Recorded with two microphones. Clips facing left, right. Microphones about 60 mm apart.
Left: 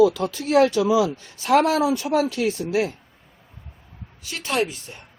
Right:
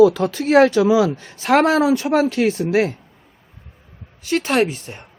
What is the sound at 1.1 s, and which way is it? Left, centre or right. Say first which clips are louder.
Speech: right 2 dB; right.